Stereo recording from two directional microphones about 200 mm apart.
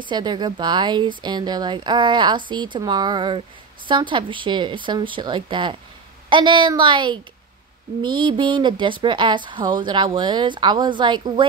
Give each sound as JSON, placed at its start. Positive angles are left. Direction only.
{"t": 0.0, "sound": "speech", "side_deg": -20}